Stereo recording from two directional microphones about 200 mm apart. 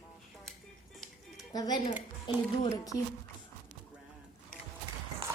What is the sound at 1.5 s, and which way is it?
Speech, 20° left (ahead or behind).